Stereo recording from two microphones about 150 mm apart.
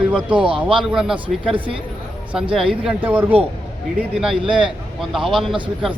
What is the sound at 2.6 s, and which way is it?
Speech, 5° right (ahead or behind).